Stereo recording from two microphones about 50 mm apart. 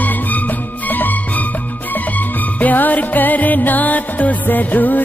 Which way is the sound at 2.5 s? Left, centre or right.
Left.